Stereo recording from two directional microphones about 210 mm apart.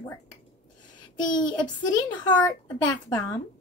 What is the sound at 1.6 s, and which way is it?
Speech, 20° left (ahead or behind).